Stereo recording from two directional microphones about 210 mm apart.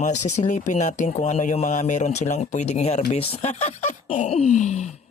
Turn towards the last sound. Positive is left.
turn(degrees=30)  # may be behind; listen again after turning